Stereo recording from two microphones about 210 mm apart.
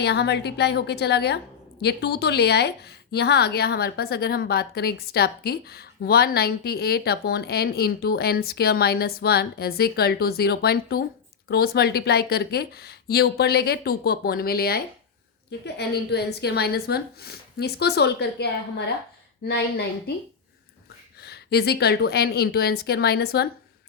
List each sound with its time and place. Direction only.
0.0 s a woman's voice: 50° left (ahead or behind)
21.2 s a woman's voice: 50° left (ahead or behind)